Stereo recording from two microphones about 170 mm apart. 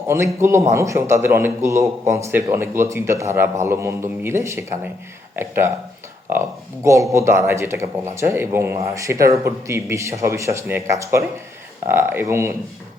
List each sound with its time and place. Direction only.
0.3 s a man's voice: 15° right (ahead or behind)